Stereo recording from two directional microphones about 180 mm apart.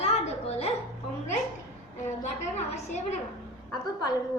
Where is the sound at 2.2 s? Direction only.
40° left (ahead or behind).